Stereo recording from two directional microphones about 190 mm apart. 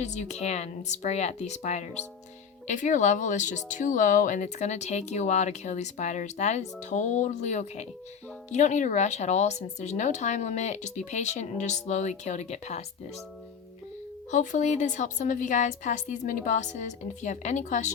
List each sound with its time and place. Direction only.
0.0 s speech: 35° left (ahead or behind)
14.3 s speech: 40° left (ahead or behind)